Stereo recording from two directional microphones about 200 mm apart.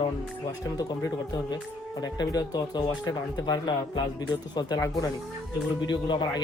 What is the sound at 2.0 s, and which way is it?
Speech, 20° left (ahead or behind).